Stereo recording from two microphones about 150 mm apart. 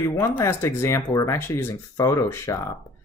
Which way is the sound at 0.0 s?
20° left (ahead or behind).